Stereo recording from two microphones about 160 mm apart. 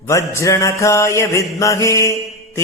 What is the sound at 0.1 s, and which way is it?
Mantra, 20° left (ahead or behind).